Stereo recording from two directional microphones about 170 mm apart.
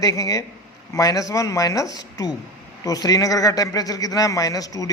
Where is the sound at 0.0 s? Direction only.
20° left (ahead or behind).